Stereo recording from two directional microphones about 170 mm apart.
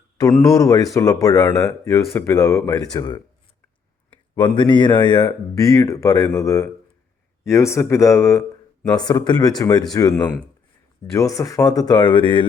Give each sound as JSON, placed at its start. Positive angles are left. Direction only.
{"t": 0.4, "sound": "speech", "side_deg": 20}
{"t": 4.4, "sound": "speech", "side_deg": 25}